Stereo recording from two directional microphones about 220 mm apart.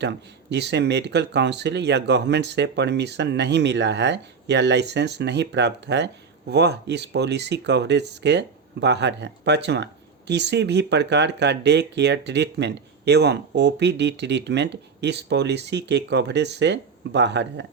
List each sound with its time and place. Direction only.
0.5 s speech: 50° right (ahead or behind)